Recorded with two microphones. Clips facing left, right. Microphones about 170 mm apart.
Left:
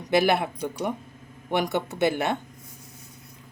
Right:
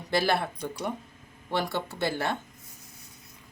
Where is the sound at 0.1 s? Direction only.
20° left (ahead or behind).